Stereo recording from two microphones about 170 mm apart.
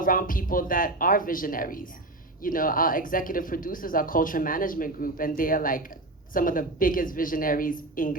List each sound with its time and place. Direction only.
0.0 s speech: 55° left (ahead or behind)